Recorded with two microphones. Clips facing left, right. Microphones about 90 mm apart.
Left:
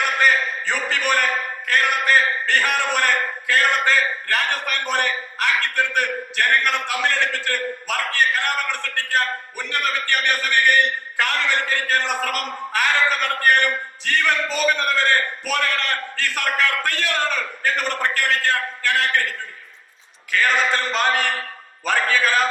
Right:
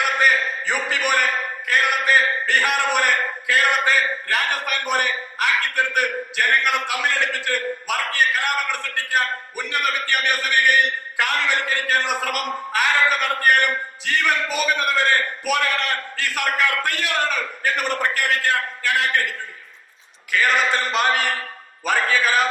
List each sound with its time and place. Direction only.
0.0 s a man's voice: 5° right (ahead or behind)
20.3 s a man's voice: 5° right (ahead or behind)